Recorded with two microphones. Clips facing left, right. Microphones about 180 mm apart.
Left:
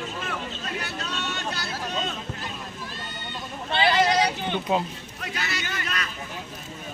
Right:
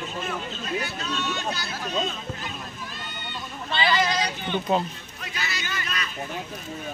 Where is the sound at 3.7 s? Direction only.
60° left (ahead or behind).